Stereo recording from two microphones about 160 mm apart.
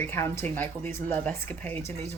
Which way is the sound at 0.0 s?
15° left (ahead or behind).